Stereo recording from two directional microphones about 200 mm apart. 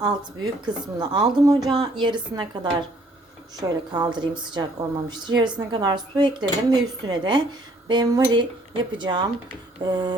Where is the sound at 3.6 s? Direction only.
20° right (ahead or behind).